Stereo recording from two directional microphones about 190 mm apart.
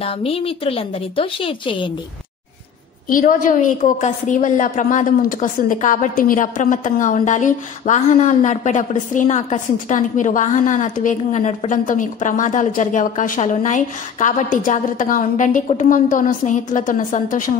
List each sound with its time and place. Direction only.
0.0 s a woman's voice: 30° left (ahead or behind)
3.1 s a woman's voice: 45° left (ahead or behind)